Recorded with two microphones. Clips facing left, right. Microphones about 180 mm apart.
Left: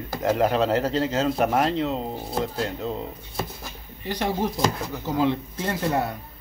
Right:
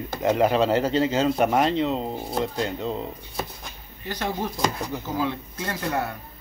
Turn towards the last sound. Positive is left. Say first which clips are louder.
# left 3 dB
turn(degrees=20)  # may be behind; listen again after turning